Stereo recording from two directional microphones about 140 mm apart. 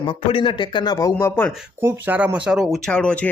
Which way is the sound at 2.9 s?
5° left (ahead or behind).